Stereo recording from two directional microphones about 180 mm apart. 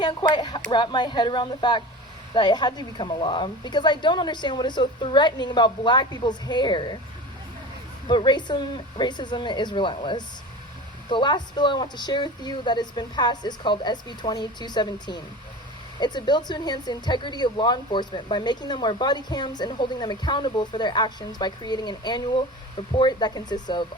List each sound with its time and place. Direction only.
0.0 s speech: 25° left (ahead or behind)
8.0 s speech: 25° left (ahead or behind)